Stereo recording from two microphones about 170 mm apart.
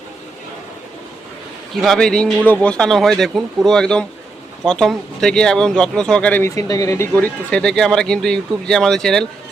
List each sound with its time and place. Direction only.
1.7 s speech: centre (ahead or behind); by 7.1 s 20° left (ahead or behind)
7.1 s speech: 5° left (ahead or behind)